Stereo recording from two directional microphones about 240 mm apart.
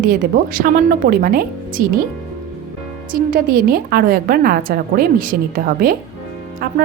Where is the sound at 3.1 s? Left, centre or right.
Right.